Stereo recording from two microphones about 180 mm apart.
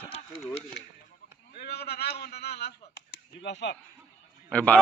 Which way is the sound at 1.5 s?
60° left (ahead or behind).